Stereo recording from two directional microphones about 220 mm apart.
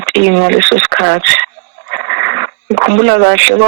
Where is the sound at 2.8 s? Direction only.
60° right (ahead or behind).